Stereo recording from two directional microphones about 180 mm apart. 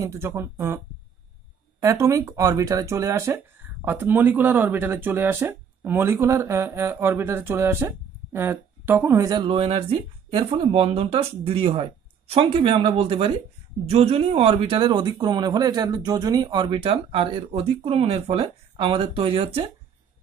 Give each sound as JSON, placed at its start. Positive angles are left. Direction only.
{"t": 0.0, "sound": "speech", "side_deg": -15}
{"t": 1.8, "sound": "a man's voice", "side_deg": -15}